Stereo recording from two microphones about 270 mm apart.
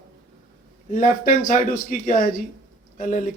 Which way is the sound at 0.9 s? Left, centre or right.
Left.